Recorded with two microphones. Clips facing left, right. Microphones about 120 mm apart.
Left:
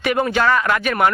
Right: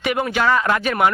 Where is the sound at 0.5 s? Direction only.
25° right (ahead or behind).